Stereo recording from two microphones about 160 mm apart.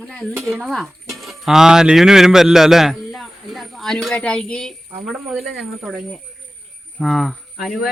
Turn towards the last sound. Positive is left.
turn(degrees=0)  # may be behind; listen again after turning